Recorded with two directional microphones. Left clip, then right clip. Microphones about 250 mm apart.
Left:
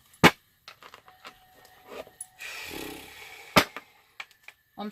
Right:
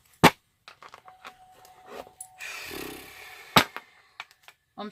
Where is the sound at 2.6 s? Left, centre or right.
Right.